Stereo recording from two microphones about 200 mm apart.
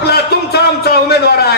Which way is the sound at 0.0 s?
50° left (ahead or behind).